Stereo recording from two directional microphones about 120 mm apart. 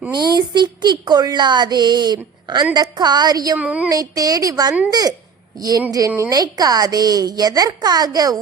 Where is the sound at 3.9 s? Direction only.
30° right (ahead or behind).